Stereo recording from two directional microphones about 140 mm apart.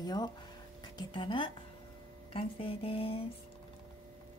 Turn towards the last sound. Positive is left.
turn(degrees=40)  # may be behind; listen again after turning